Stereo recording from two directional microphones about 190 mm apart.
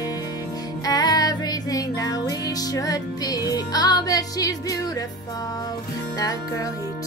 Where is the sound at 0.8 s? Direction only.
20° left (ahead or behind).